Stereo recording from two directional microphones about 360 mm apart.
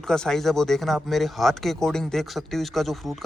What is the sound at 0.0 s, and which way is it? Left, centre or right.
Speech, centre.